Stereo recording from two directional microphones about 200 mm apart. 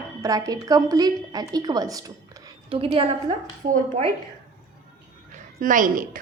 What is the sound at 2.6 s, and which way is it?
Speech, 30° right (ahead or behind).